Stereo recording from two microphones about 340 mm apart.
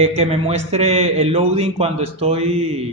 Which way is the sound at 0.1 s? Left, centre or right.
Centre.